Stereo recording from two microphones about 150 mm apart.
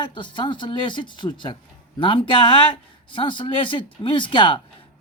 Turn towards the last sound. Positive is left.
turn(degrees=35)  # may be behind; listen again after turning